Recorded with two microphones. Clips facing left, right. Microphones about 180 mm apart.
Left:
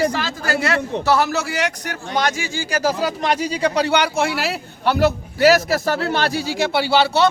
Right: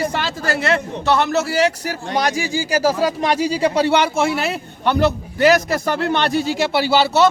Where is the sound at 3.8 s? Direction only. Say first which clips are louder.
Right 2 dB; 25° right (ahead or behind).